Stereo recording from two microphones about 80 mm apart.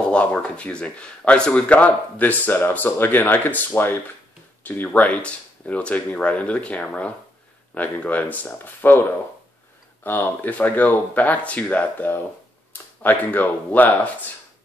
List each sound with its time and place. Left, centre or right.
0.0 s speech: centre
10.0 s speech: left